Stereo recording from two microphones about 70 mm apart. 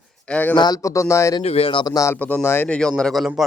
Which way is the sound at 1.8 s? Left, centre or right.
Left.